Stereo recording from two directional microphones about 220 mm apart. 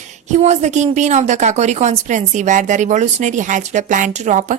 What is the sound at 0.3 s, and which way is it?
A woman's voice, 30° right (ahead or behind).